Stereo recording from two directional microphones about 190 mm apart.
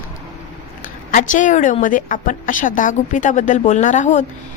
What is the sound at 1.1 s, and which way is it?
A woman's voice, 45° left (ahead or behind).